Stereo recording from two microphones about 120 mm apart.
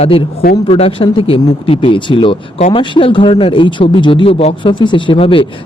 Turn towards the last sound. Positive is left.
turn(degrees=45)  # may be behind; listen again after turning